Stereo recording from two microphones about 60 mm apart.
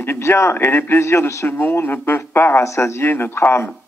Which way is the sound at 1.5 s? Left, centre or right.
Left.